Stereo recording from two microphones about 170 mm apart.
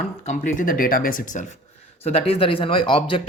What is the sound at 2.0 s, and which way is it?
Speech, 35° left (ahead or behind).